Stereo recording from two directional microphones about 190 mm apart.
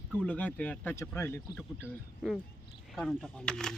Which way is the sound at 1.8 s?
5° right (ahead or behind).